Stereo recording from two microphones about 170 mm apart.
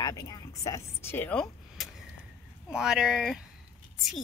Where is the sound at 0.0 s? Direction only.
25° left (ahead or behind).